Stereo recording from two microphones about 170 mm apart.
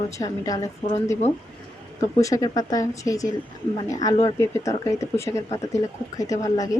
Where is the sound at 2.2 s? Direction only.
20° left (ahead or behind).